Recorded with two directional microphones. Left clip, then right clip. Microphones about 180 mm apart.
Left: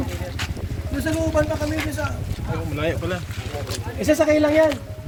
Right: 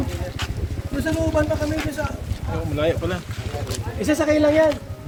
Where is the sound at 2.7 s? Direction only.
65° right (ahead or behind).